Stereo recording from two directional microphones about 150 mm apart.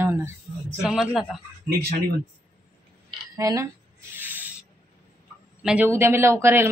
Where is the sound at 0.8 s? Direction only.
Centre (ahead or behind).